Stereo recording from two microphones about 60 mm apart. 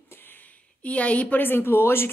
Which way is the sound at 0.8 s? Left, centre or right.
Left.